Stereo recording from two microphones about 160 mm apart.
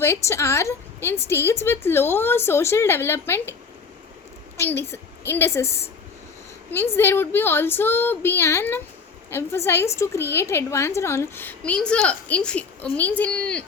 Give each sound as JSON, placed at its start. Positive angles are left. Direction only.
{"t": 0.0, "sound": "a woman's voice", "side_deg": 15}
{"t": 4.5, "sound": "a woman's voice", "side_deg": 15}